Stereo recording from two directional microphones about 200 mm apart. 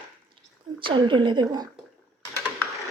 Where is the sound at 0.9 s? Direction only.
25° right (ahead or behind).